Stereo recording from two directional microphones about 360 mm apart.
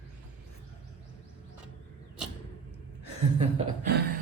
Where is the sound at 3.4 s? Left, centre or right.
Centre.